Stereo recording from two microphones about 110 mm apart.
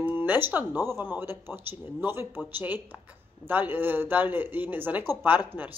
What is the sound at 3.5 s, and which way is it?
Speech, 20° right (ahead or behind).